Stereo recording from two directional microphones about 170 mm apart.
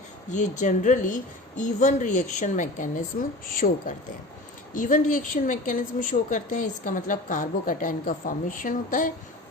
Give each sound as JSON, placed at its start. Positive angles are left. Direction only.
{"t": 0.3, "sound": "a woman's voice", "side_deg": 45}